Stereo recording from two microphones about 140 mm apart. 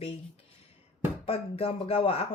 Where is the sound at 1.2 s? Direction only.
45° left (ahead or behind).